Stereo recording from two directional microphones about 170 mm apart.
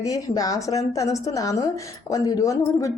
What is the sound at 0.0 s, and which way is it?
A woman's voice, 20° left (ahead or behind).